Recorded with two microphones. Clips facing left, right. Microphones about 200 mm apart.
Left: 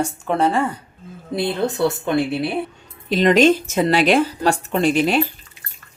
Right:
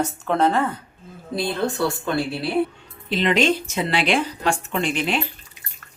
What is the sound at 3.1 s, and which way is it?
Speech, 45° left (ahead or behind).